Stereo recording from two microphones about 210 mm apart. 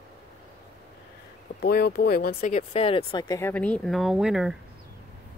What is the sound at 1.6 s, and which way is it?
Speech, 50° left (ahead or behind).